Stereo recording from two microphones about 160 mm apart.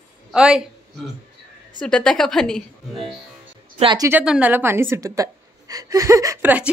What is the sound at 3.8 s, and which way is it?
Speech, 30° right (ahead or behind).